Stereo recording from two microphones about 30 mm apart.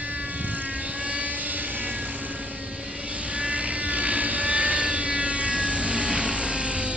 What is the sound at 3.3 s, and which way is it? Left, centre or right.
Vehicle, right.